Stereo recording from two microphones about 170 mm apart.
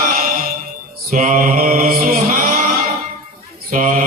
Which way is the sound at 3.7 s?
50° right (ahead or behind).